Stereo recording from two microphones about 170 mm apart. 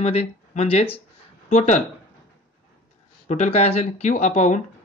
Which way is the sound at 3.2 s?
45° left (ahead or behind).